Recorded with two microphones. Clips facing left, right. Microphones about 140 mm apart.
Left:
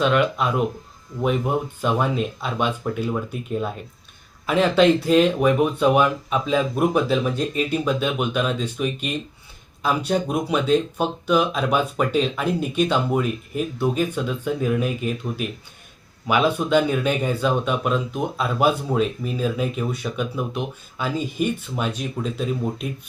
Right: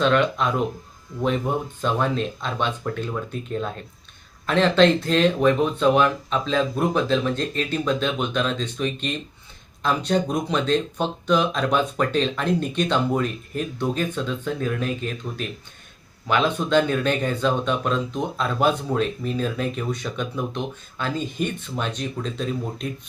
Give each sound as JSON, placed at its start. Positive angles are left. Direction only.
{"t": 0.0, "sound": "speech", "side_deg": 5}